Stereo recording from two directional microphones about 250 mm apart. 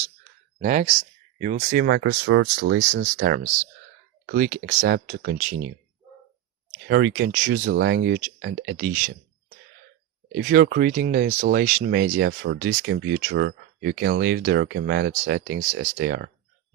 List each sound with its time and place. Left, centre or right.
0.6 s speech: right
6.8 s speech: right